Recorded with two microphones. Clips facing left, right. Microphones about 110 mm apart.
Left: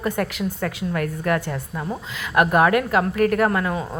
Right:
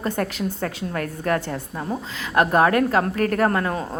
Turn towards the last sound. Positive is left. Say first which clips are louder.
# even
turn(degrees=-40)  # may be behind; listen again after turning